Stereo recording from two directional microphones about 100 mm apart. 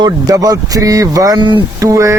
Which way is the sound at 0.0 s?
35° right (ahead or behind).